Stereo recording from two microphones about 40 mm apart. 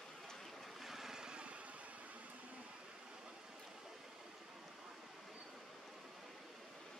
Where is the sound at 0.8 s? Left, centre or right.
Centre.